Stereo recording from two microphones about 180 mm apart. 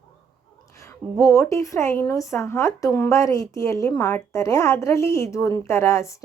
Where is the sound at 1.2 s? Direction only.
15° left (ahead or behind).